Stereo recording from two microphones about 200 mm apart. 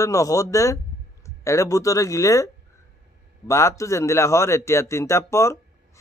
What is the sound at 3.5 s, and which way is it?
A man's voice, 15° left (ahead or behind).